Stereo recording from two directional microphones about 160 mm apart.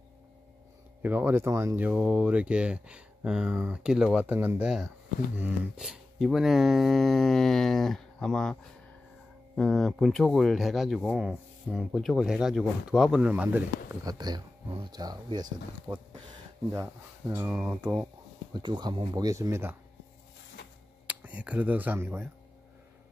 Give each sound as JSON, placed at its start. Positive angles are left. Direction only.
{"t": 1.0, "sound": "speech", "side_deg": -10}
{"t": 14.0, "sound": "speech", "side_deg": -25}
{"t": 15.9, "sound": "speech", "side_deg": -5}
{"t": 18.5, "sound": "speech", "side_deg": -30}
{"t": 21.1, "sound": "speech", "side_deg": -10}